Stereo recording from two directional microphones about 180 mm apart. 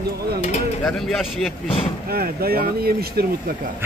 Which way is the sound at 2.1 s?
55° right (ahead or behind).